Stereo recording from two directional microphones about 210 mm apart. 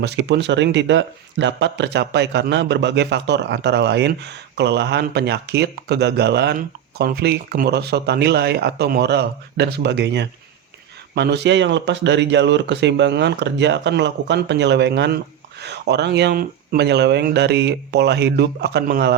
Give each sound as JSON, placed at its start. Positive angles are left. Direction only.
{"t": 0.0, "sound": "speech", "side_deg": -55}